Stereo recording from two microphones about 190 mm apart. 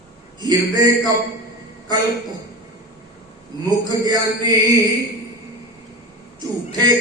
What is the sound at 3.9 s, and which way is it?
Speech, 20° right (ahead or behind).